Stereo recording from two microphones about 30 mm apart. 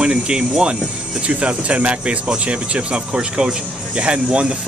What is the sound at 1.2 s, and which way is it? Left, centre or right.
Speech, right.